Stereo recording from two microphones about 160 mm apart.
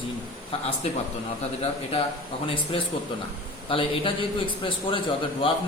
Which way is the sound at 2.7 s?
35° left (ahead or behind).